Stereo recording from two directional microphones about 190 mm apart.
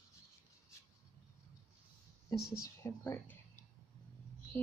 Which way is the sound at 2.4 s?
55° left (ahead or behind).